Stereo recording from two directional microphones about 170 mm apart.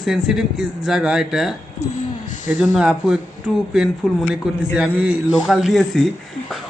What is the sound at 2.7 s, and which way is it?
Speech, 5° right (ahead or behind).